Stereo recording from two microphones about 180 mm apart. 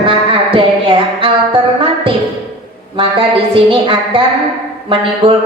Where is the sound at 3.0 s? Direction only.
30° right (ahead or behind).